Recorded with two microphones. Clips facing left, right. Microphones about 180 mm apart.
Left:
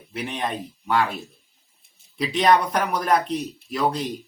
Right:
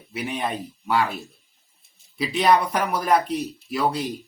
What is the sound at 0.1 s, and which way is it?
Speech, 5° right (ahead or behind).